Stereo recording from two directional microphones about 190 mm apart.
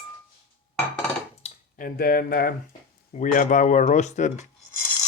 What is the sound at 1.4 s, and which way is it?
Speech, 45° left (ahead or behind).